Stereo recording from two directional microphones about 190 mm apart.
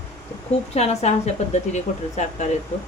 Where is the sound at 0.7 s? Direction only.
35° left (ahead or behind).